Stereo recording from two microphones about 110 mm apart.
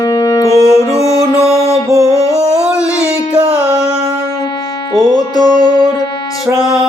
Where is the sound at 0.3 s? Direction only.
30° left (ahead or behind).